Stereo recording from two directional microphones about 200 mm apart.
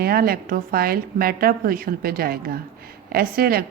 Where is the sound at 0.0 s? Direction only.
50° right (ahead or behind).